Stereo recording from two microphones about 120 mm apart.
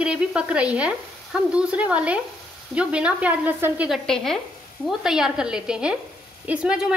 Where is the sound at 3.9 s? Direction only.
5° left (ahead or behind).